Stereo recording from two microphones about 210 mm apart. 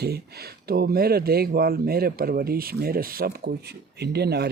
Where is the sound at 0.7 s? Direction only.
45° right (ahead or behind).